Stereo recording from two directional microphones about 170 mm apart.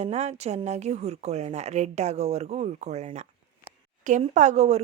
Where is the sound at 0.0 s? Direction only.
40° right (ahead or behind).